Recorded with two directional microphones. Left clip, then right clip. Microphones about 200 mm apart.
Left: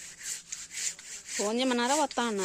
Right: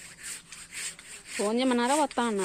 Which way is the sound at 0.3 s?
15° left (ahead or behind).